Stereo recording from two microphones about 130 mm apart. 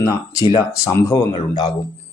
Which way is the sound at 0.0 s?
25° left (ahead or behind).